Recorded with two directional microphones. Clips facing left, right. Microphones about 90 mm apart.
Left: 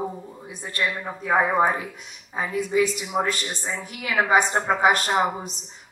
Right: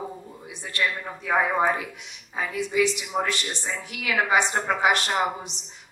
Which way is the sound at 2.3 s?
40° left (ahead or behind).